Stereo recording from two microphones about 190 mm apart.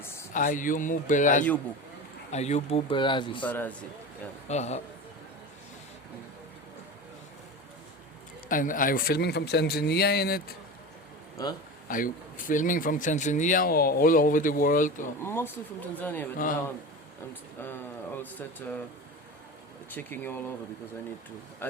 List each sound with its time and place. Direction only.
0.0 s a sound: 15° left (ahead or behind)
0.3 s speech: 45° left (ahead or behind); by 3.4 s 25° left (ahead or behind)
3.4 s speech: 10° left (ahead or behind)
4.4 s speech: 35° left (ahead or behind)
8.4 s a man's voice: 45° left (ahead or behind)
11.4 s a man's voice: 20° left (ahead or behind)
11.9 s speech: 45° left (ahead or behind)
15.2 s speech: 10° left (ahead or behind)
18.2 s speech: 10° left (ahead or behind)
19.9 s speech: 10° left (ahead or behind)
21.6 s speech: 10° left (ahead or behind)